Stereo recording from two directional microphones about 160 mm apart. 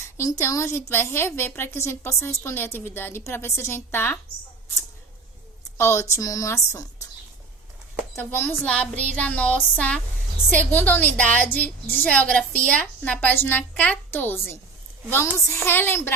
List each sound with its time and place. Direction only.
0.0 s a woman's voice: 20° left (ahead or behind)
5.7 s a woman's voice: 15° left (ahead or behind)
8.1 s a woman's voice: 15° left (ahead or behind)